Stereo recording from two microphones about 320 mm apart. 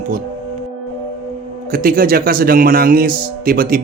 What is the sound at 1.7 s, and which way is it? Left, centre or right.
A man's voice, right.